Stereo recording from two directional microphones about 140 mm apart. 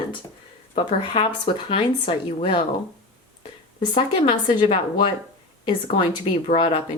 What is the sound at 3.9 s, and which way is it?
Speech, 35° left (ahead or behind).